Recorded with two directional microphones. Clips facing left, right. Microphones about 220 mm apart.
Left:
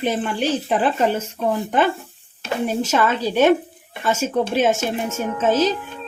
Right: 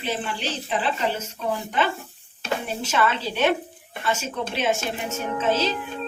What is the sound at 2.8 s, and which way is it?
A woman's voice, 45° left (ahead or behind).